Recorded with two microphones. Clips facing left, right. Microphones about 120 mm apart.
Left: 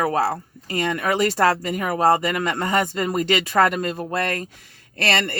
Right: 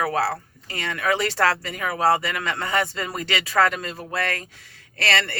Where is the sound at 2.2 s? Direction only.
45° left (ahead or behind).